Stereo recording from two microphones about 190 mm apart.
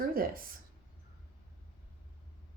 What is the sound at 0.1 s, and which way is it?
Speech, 50° right (ahead or behind).